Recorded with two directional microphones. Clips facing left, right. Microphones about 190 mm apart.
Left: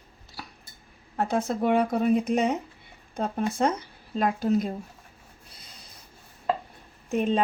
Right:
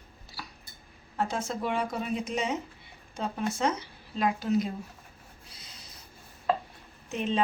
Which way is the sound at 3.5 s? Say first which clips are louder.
Left 4 dB; 55° left (ahead or behind).